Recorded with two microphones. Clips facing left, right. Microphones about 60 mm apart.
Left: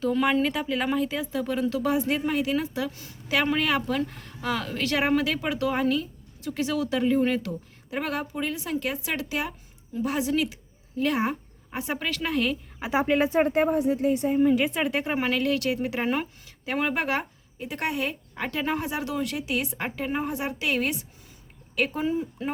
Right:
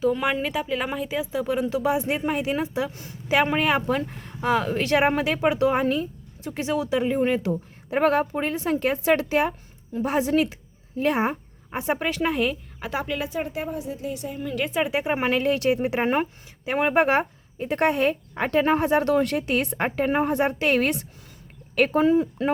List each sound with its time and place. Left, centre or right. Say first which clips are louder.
0.0 s speech: even; centre
7.5 s a woman's voice: right 6 dB; right
12.8 s speech: left 3 dB; centre
13.1 s a woman's voice: left 6 dB; left
14.7 s speech: right 3 dB; centre
15.1 s speech: right 4 dB; right
17.7 s speech: right 8 dB; right